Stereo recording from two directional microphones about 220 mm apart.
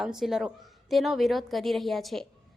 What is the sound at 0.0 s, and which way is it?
A woman's voice, centre (ahead or behind).